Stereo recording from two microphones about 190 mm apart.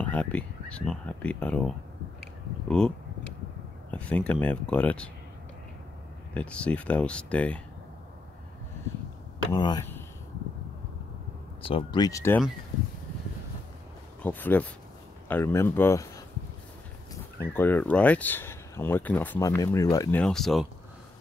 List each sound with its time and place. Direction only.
0.0 s speech: 5° left (ahead or behind)
6.3 s speech: 5° left (ahead or behind)
9.5 s speech: 20° left (ahead or behind)
11.6 s speech: 25° left (ahead or behind)
14.2 s speech: 10° left (ahead or behind)
17.4 s speech: 10° left (ahead or behind)
20.2 s speech: centre (ahead or behind)